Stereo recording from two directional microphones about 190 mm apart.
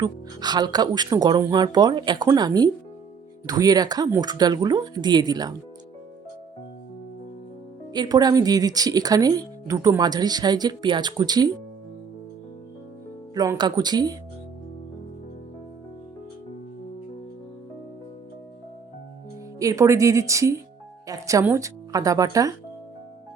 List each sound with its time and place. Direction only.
0.0 s speech: 20° right (ahead or behind)
7.9 s speech: 20° right (ahead or behind)
13.3 s speech: 20° right (ahead or behind)
19.5 s speech: 15° right (ahead or behind)